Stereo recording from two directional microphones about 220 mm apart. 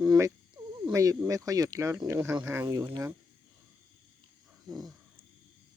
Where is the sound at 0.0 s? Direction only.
15° right (ahead or behind).